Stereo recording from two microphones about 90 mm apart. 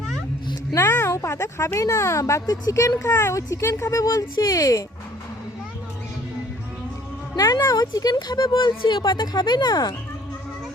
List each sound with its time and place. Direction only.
0.8 s speech: 25° left (ahead or behind); by 2.9 s 40° left (ahead or behind)
3.2 s speech: 30° left (ahead or behind)
7.3 s speech: 45° left (ahead or behind)